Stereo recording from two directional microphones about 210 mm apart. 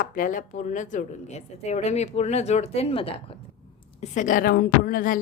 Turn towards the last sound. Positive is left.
turn(degrees=40)  # may be behind; listen again after turning